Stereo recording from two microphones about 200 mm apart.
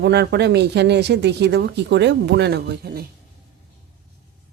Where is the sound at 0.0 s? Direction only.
55° right (ahead or behind).